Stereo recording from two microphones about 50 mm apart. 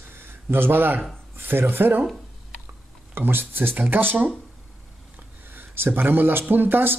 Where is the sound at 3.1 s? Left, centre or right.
Right.